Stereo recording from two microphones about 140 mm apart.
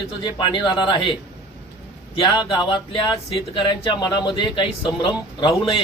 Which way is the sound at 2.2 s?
35° left (ahead or behind).